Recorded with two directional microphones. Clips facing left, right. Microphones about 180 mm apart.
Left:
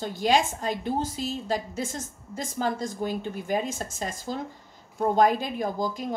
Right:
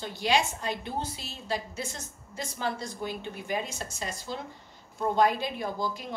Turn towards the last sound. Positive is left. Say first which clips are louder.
# left 4 dB
turn(degrees=45)  # may be behind; listen again after turning